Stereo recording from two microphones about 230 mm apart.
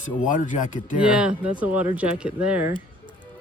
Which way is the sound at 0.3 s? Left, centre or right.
Left.